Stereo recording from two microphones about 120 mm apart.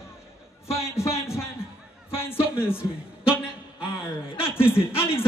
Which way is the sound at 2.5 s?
20° left (ahead or behind).